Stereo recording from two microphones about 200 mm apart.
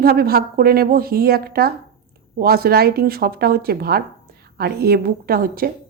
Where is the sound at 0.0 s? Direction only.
50° right (ahead or behind).